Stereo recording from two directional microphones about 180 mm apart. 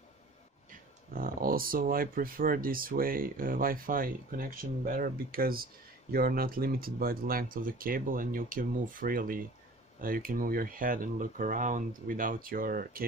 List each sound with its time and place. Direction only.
0.7 s speech: 50° right (ahead or behind)